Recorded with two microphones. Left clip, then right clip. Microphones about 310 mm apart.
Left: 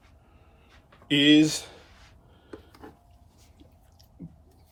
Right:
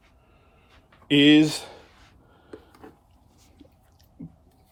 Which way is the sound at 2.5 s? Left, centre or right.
Centre.